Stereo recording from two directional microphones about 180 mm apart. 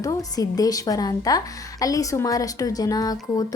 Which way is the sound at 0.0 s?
20° left (ahead or behind).